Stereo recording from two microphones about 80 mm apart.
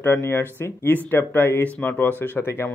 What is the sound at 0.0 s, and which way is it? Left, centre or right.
Speech, left.